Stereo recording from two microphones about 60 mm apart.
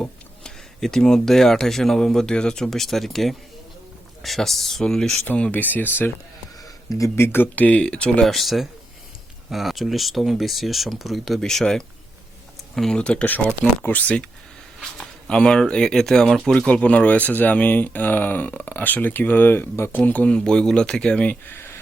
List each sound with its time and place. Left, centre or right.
0.0 s speech: centre
5.5 s speech: left
6.6 s a sound: left
7.4 s speech: left
8.2 s speech: centre
13.0 s speech: centre
13.2 s speech: left
14.9 s speech: centre
16.6 s speech: centre; by 20.0 s left
20.1 s speech: left
20.3 s speech: centre